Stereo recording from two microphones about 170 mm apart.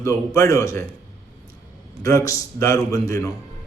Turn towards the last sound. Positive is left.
turn(degrees=20)  # may be behind; listen again after turning